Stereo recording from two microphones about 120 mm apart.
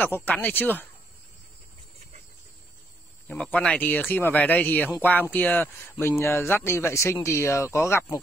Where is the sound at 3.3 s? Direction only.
10° left (ahead or behind).